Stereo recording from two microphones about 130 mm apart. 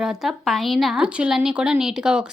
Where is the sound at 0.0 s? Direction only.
5° right (ahead or behind).